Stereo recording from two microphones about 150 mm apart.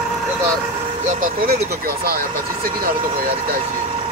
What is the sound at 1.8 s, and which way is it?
Speech, 90° right.